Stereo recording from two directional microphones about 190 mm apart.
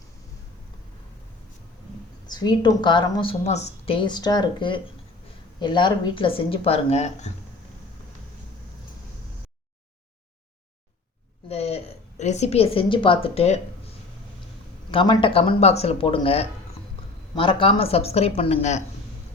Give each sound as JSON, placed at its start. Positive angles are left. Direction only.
{"t": 2.2, "sound": "speech", "side_deg": 20}
{"t": 11.4, "sound": "a sound", "side_deg": 35}
{"t": 14.8, "sound": "speech", "side_deg": 25}